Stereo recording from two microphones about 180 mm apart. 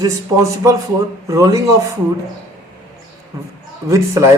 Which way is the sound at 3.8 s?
15° right (ahead or behind).